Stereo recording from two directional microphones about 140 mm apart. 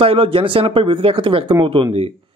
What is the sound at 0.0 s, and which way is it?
A man's voice, 40° right (ahead or behind).